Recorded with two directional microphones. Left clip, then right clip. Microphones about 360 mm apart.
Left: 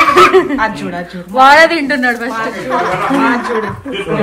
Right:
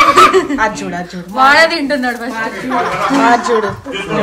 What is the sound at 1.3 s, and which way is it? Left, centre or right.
A woman's voice, centre.